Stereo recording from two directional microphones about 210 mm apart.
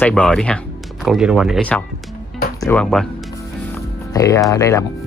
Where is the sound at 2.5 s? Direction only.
15° left (ahead or behind).